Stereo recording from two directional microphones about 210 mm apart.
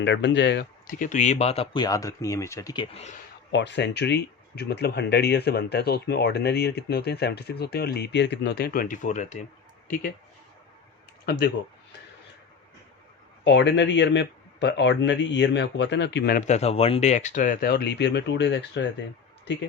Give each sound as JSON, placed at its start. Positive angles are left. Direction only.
{"t": 0.0, "sound": "speech", "side_deg": 55}
{"t": 3.5, "sound": "speech", "side_deg": 55}
{"t": 11.3, "sound": "speech", "side_deg": 50}
{"t": 13.4, "sound": "speech", "side_deg": 60}
{"t": 16.5, "sound": "speech", "side_deg": 30}